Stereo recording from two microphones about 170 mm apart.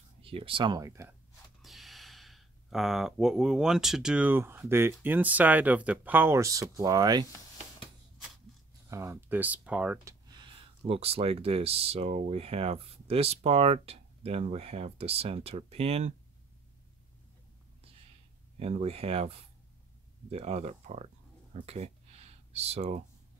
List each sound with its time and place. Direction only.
0.2 s speech: 35° right (ahead or behind); by 1.1 s 20° right (ahead or behind)
1.6 s speech: centre (ahead or behind); by 7.2 s 20° right (ahead or behind)
8.9 s speech: 15° right (ahead or behind)
10.2 s speech: 25° right (ahead or behind)
18.6 s speech: 35° right (ahead or behind)
21.5 s a sound: 40° right (ahead or behind)